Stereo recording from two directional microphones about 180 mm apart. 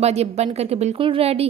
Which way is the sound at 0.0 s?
35° right (ahead or behind).